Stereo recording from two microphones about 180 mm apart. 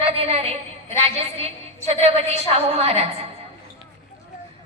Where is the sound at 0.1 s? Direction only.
35° right (ahead or behind).